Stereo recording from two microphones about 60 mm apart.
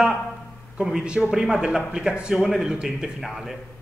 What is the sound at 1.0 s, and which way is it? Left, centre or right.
A man's voice, centre.